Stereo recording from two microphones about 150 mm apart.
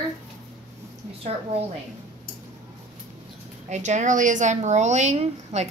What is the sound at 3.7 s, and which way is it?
Speech, 50° right (ahead or behind).